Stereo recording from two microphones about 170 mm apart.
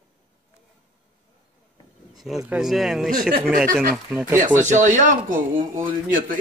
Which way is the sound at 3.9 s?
Centre (ahead or behind).